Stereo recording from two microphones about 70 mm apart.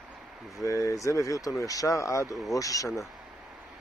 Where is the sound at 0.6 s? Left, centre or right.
Left.